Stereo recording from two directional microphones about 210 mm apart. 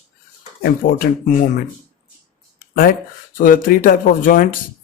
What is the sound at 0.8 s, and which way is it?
Speech, 45° left (ahead or behind).